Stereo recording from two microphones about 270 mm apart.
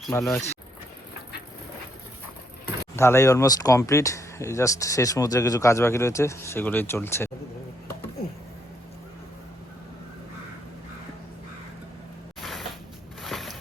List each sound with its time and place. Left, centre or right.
0.1 s speech: centre
2.9 s speech: centre
12.4 s a sound: centre